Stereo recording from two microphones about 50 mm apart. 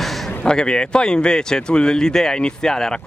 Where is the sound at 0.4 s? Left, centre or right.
Centre.